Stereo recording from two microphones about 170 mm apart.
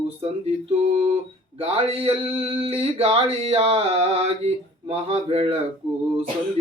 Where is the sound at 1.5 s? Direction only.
35° right (ahead or behind).